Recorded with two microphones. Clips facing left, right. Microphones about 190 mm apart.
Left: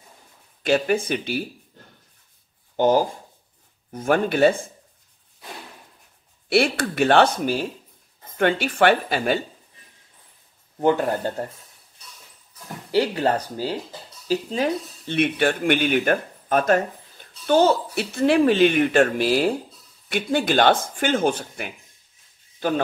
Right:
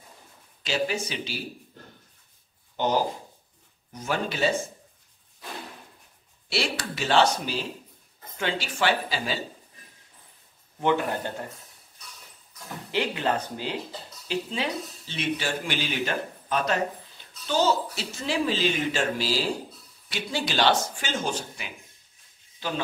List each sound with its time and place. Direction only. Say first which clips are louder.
0.6 s speech: left 8 dB; 55° left (ahead or behind)
2.7 s speech: left 6 dB; 45° left (ahead or behind)
6.5 s speech: left 9 dB; 55° left (ahead or behind)
10.8 s speech: left 5 dB; 40° left (ahead or behind)
12.9 s speech: left 6 dB; 40° left (ahead or behind)